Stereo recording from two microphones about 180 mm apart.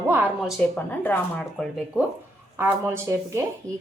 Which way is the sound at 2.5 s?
15° right (ahead or behind).